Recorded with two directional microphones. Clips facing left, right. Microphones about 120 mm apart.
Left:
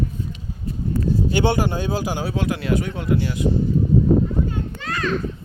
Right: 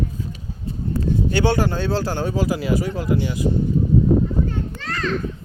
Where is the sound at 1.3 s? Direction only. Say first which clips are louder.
Right 1 dB; 20° left (ahead or behind).